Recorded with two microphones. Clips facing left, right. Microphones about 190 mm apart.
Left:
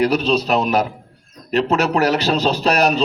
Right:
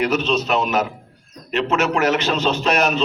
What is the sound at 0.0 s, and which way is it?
A man's voice, 35° left (ahead or behind).